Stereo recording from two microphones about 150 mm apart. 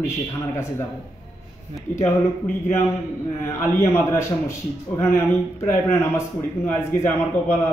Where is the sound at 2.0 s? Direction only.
15° left (ahead or behind).